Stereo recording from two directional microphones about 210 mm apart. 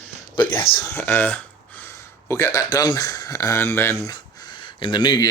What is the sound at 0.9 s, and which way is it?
Speech, 10° left (ahead or behind).